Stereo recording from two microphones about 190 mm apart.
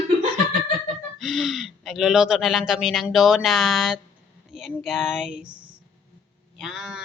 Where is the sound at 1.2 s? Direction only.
Centre (ahead or behind).